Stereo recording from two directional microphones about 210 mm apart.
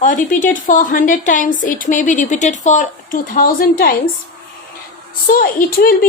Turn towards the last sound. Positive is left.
turn(degrees=45)  # may be behind; listen again after turning